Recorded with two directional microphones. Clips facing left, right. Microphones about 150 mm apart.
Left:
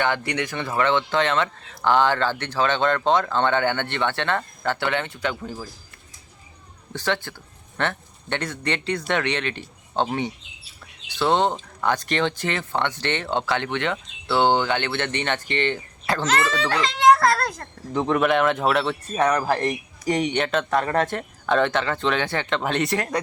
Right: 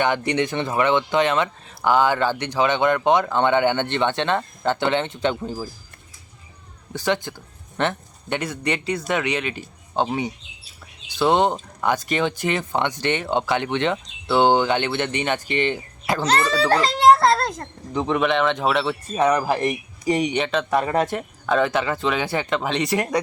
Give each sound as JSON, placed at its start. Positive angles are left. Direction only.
{"t": 0.0, "sound": "speech", "side_deg": -20}
{"t": 6.9, "sound": "speech", "side_deg": -15}
{"t": 16.2, "sound": "a child's voice", "side_deg": -35}
{"t": 17.9, "sound": "speech", "side_deg": 0}
{"t": 20.4, "sound": "speech", "side_deg": 0}
{"t": 20.7, "sound": "speech", "side_deg": -10}
{"t": 23.0, "sound": "speech", "side_deg": -15}